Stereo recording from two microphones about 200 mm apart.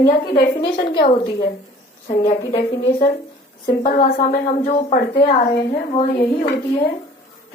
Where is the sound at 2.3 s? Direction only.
40° left (ahead or behind).